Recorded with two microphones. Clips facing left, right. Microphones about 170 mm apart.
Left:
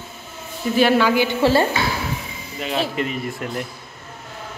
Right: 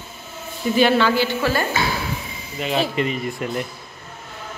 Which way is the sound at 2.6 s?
Centre (ahead or behind).